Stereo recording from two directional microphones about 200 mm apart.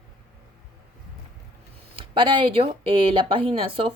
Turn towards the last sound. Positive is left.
turn(degrees=-25)  # may be behind; listen again after turning